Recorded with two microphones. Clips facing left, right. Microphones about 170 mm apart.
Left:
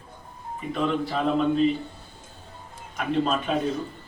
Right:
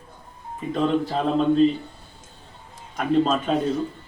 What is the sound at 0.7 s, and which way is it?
Speech, 35° right (ahead or behind).